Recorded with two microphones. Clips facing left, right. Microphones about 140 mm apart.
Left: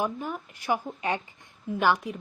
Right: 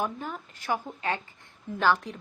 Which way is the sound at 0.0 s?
10° left (ahead or behind).